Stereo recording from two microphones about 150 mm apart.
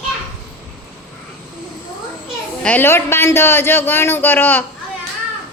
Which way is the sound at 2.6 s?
15° left (ahead or behind).